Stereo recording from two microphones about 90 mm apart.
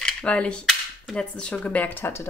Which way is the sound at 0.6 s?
Centre (ahead or behind).